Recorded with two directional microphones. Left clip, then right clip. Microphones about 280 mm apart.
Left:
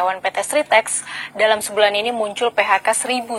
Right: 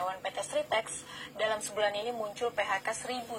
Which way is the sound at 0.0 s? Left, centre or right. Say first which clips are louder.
Left 15 dB; left.